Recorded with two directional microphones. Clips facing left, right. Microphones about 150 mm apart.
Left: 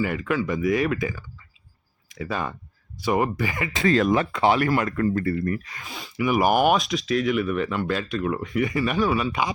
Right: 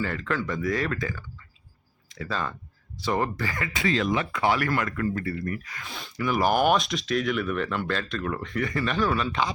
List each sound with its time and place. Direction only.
0.0 s speech: 10° left (ahead or behind)
3.8 s speech: 45° left (ahead or behind)
4.4 s speech: 25° left (ahead or behind)
4.9 s speech: 40° left (ahead or behind)
5.9 s speech: centre (ahead or behind)